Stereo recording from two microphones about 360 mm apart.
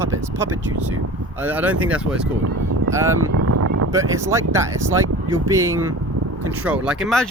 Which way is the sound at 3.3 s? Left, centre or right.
Right.